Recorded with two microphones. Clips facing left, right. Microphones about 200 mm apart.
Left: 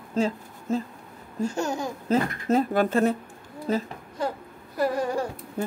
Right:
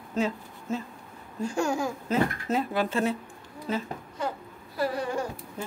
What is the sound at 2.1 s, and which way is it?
Speech, 40° left (ahead or behind).